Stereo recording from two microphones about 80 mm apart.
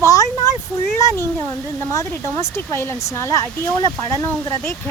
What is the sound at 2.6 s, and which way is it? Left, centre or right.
Speech, left.